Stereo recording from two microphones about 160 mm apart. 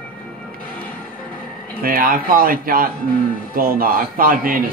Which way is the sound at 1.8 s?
65° right (ahead or behind).